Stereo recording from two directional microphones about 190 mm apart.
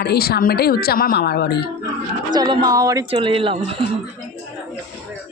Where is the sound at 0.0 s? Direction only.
55° left (ahead or behind).